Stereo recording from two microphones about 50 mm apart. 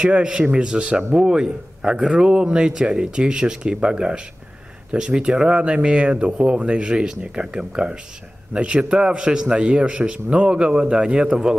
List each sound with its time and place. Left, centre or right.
0.0 s a man's voice: centre